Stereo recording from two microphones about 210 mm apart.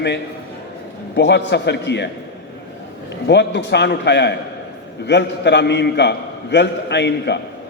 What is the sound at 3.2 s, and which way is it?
A man's voice, 55° left (ahead or behind).